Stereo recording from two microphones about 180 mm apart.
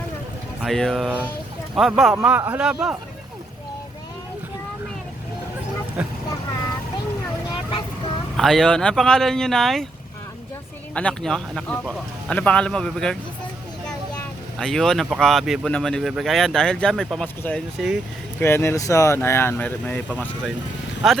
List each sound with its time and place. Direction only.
0.6 s speech: centre (ahead or behind)
2.1 s speech: 10° right (ahead or behind)
8.4 s speech: centre (ahead or behind)
10.9 s speech: 5° left (ahead or behind)
14.6 s speech: centre (ahead or behind)
18.3 s speech: 15° left (ahead or behind)